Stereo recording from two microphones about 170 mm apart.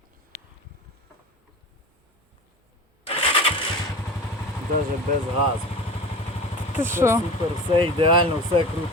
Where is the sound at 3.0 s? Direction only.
35° left (ahead or behind).